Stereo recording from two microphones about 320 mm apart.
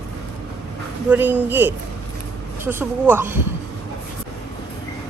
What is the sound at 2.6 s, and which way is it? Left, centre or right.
Speech, centre.